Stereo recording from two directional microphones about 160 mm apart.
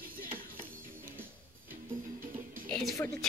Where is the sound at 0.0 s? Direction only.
60° right (ahead or behind).